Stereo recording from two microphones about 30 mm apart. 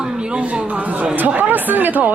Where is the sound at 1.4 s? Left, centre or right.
Right.